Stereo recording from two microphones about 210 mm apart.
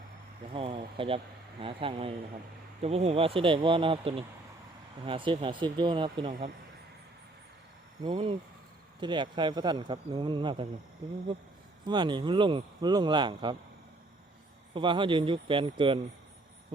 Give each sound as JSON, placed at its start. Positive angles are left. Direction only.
{"t": 0.5, "sound": "speech", "side_deg": -25}
{"t": 8.0, "sound": "speech", "side_deg": -20}
{"t": 11.9, "sound": "speech", "side_deg": -20}
{"t": 14.7, "sound": "speech", "side_deg": -25}